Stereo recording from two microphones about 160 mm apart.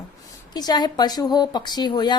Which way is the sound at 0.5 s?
25° left (ahead or behind).